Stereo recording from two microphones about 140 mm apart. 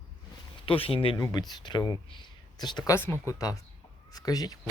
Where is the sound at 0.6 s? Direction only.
40° left (ahead or behind).